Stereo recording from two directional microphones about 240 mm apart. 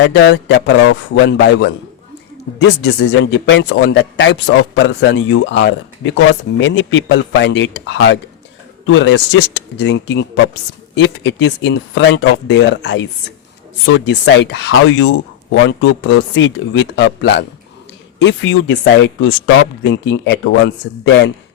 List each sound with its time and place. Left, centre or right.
0.0 s speech: left
2.8 s speech: left